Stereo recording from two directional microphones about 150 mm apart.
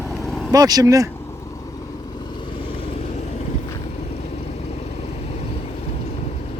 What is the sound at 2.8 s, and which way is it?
Vehicle, 40° left (ahead or behind).